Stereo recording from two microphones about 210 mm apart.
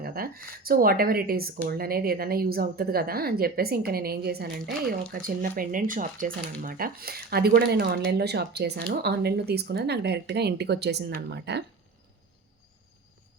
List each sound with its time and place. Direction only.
0.0 s speech: 45° right (ahead or behind)